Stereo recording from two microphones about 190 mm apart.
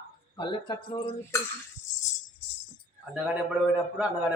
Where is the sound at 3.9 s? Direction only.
5° right (ahead or behind).